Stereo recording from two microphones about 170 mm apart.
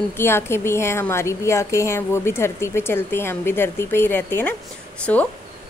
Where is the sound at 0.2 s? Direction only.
15° left (ahead or behind).